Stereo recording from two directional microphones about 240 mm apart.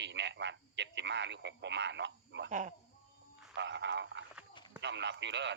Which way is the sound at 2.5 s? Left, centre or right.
Right.